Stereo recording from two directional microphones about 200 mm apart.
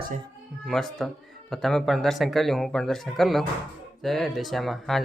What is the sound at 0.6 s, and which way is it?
Speech, centre (ahead or behind).